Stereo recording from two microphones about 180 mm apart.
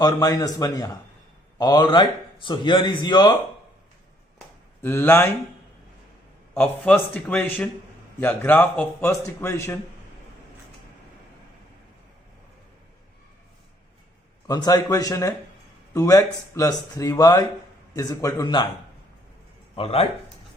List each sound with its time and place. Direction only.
0.0 s speech: 20° left (ahead or behind)
4.8 s speech: 10° left (ahead or behind)
6.5 s speech: 5° left (ahead or behind)
14.4 s speech: 20° left (ahead or behind)
19.7 s speech: 30° left (ahead or behind)